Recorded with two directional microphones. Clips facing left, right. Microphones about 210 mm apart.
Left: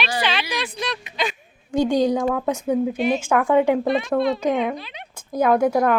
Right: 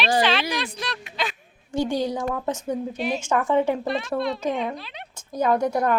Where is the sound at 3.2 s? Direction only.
65° left (ahead or behind).